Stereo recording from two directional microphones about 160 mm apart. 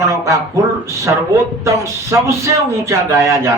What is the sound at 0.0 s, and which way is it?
Speech, 20° right (ahead or behind).